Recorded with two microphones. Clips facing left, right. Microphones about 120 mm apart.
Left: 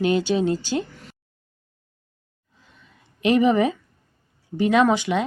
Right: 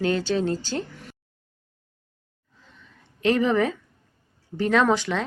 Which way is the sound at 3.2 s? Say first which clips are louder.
Left 3 dB; 15° left (ahead or behind).